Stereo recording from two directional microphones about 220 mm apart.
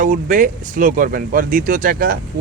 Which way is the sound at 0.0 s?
40° right (ahead or behind).